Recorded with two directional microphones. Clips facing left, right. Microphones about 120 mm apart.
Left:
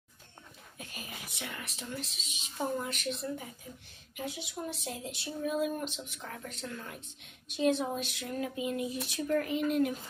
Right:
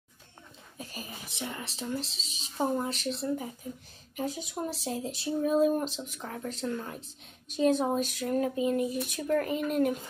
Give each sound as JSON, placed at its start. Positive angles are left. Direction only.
{"t": 0.7, "sound": "speech", "side_deg": -35}